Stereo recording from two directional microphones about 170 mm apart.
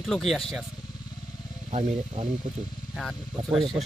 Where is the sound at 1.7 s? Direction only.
40° right (ahead or behind).